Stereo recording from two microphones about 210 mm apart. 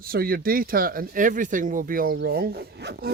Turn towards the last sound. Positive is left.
turn(degrees=-50)  # may be behind; listen again after turning